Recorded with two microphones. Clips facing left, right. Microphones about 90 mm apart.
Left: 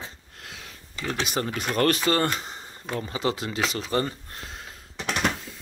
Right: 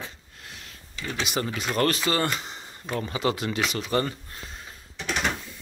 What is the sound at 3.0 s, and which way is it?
Speech, 25° left (ahead or behind).